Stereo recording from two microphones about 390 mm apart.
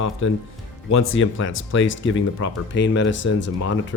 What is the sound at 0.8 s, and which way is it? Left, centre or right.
Speech, left.